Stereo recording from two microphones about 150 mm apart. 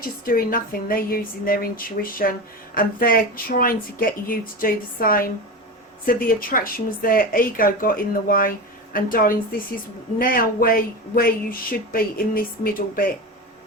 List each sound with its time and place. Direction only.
0.0 s speech: 70° left (ahead or behind)